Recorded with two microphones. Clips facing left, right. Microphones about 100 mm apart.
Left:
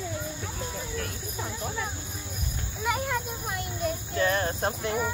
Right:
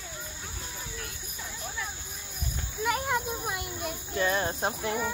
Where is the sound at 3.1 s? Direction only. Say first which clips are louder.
Right 1 dB; 10° right (ahead or behind).